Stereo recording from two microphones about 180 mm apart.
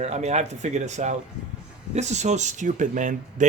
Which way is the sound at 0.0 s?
40° right (ahead or behind).